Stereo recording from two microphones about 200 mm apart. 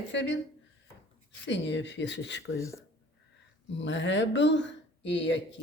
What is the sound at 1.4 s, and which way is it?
Speech, 65° left (ahead or behind).